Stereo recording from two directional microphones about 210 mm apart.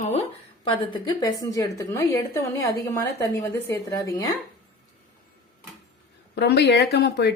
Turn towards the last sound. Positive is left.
turn(degrees=50)  # may be behind; listen again after turning